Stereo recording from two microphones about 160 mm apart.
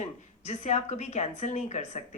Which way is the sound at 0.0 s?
45° left (ahead or behind).